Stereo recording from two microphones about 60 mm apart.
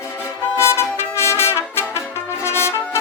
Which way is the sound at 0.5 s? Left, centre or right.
Left.